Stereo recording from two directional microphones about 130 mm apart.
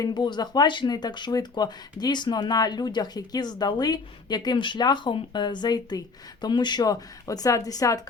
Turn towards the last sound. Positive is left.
turn(degrees=25)  # may be behind; listen again after turning